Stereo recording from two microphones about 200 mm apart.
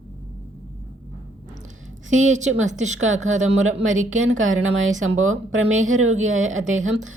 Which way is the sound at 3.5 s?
90° right.